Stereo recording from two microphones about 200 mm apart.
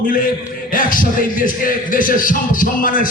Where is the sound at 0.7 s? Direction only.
45° left (ahead or behind).